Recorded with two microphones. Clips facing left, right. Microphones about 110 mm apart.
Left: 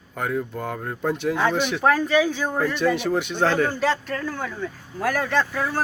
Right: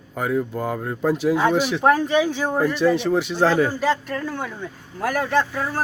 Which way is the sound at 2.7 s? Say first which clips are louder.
Right 3 dB; centre (ahead or behind).